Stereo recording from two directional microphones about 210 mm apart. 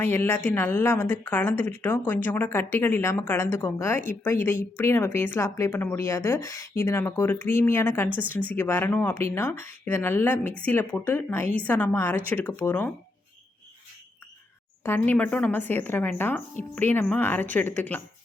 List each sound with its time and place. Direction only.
0.0 s speech: 10° left (ahead or behind)
14.8 s speech: 10° left (ahead or behind)